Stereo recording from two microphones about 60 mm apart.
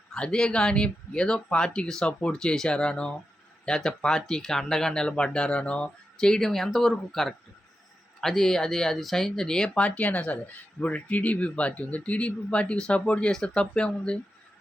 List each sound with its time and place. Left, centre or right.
0.1 s speech: centre
9.6 s speech: left